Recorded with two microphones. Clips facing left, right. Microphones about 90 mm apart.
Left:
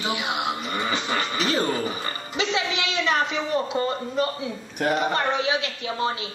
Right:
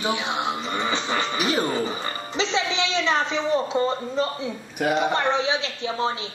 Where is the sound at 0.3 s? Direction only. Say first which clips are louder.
Right 1 dB; 25° right (ahead or behind).